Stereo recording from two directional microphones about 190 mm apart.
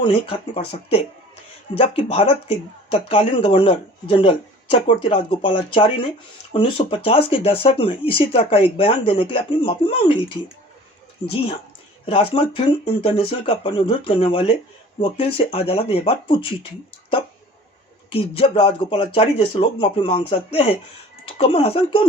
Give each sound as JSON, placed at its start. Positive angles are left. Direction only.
{"t": 0.0, "sound": "speech", "side_deg": 30}
{"t": 12.0, "sound": "speech", "side_deg": 30}
{"t": 18.1, "sound": "speech", "side_deg": 30}